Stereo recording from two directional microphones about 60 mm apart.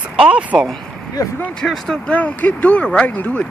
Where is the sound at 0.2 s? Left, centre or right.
Right.